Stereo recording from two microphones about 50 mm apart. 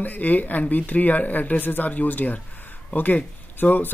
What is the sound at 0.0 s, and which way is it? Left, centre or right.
Speech, left.